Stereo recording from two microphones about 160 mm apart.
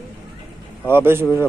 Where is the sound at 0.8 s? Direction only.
15° right (ahead or behind).